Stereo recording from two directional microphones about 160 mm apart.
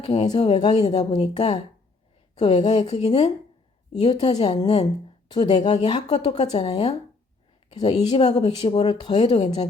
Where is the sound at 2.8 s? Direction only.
40° left (ahead or behind).